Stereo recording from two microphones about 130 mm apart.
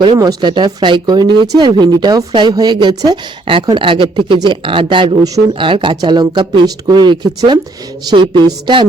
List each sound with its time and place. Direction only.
0.0 s speech: 30° right (ahead or behind)
5.5 s speech: 40° right (ahead or behind)